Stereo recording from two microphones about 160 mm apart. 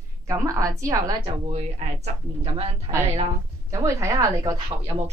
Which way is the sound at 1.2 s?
45° right (ahead or behind).